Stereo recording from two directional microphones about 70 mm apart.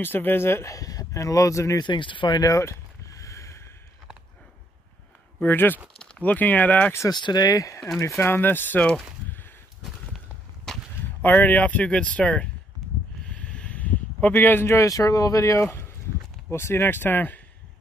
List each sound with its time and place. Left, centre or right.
0.0 s speech: left
0.7 s speech: left
1.8 s speech: left
2.5 s a sound: left
5.4 s speech: left
5.9 s a sound: centre
6.2 s speech: left
7.1 s speech: left
8.2 s speech: left
11.2 s speech: left
13.2 s a sound: centre; by 15.9 s left
16.4 s speech: left